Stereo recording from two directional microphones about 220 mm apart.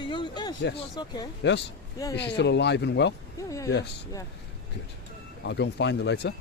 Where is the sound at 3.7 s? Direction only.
50° left (ahead or behind).